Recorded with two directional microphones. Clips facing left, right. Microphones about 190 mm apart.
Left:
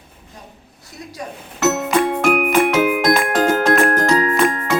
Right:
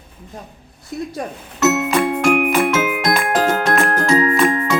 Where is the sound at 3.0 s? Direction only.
50° left (ahead or behind).